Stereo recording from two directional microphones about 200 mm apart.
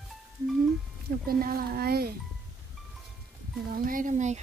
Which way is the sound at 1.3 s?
45° right (ahead or behind).